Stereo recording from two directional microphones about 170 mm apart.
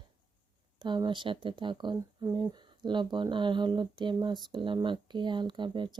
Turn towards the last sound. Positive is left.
turn(degrees=-25)  # may be behind; listen again after turning